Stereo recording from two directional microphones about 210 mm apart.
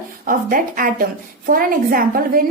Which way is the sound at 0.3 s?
40° right (ahead or behind).